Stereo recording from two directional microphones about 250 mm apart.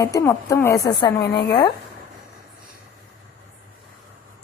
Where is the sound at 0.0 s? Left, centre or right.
Centre.